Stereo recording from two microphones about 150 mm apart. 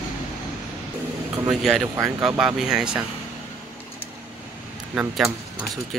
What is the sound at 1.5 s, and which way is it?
Speech, centre (ahead or behind).